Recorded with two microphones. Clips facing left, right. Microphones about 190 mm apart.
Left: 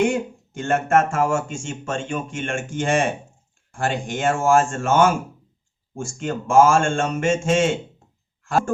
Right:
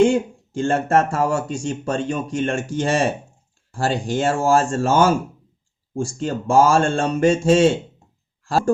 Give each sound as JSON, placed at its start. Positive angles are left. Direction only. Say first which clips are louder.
{"t": 0.0, "sound": "speech", "louder": "right 5 dB", "side_deg": -30}